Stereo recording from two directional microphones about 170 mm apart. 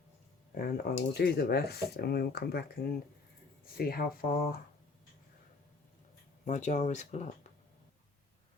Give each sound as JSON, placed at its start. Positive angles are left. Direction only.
{"t": 0.5, "sound": "speech", "side_deg": 60}
{"t": 6.4, "sound": "speech", "side_deg": 45}